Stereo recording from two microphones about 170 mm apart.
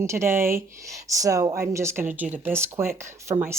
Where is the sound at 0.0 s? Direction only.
15° right (ahead or behind).